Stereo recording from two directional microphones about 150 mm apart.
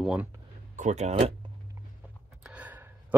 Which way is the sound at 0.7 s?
50° right (ahead or behind).